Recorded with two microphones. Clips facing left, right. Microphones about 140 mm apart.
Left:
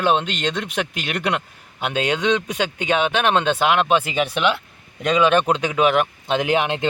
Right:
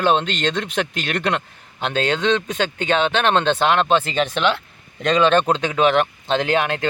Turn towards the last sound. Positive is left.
turn(degrees=20)  # may be behind; listen again after turning